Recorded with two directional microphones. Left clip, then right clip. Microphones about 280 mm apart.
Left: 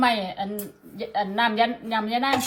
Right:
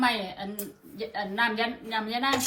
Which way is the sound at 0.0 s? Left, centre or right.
Left.